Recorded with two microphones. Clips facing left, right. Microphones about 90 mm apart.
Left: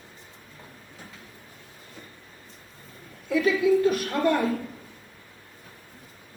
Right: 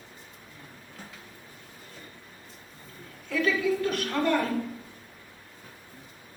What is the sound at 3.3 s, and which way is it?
Speech, 15° left (ahead or behind).